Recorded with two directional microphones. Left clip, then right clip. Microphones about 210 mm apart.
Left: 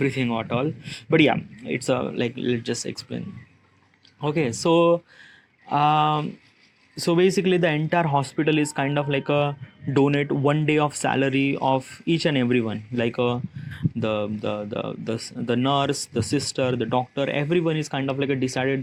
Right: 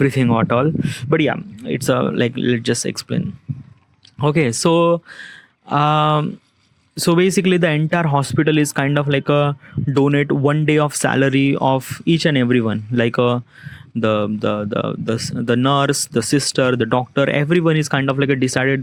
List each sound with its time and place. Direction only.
0.0 s speech: 45° right (ahead or behind)